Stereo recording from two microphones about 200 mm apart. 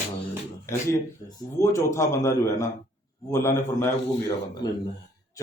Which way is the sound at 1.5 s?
15° left (ahead or behind).